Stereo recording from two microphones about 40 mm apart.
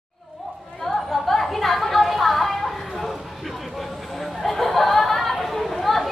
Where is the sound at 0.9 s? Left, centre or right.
Centre.